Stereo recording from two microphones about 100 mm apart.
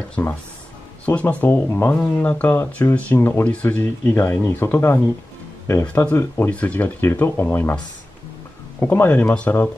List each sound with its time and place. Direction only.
0.2 s speech: 20° left (ahead or behind)
8.7 s speech: 20° left (ahead or behind)